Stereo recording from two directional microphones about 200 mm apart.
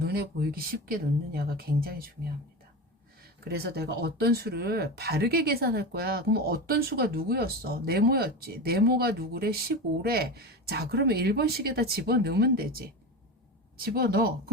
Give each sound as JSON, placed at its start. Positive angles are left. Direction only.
{"t": 0.0, "sound": "speech", "side_deg": -50}
{"t": 3.4, "sound": "speech", "side_deg": -50}